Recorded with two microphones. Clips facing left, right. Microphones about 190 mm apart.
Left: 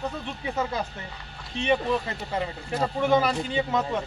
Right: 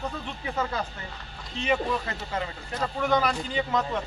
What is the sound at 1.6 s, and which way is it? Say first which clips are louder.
Speech: left 2 dB; 20° left (ahead or behind).